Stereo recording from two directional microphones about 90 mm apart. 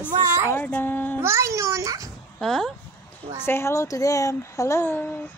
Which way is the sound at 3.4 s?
30° left (ahead or behind).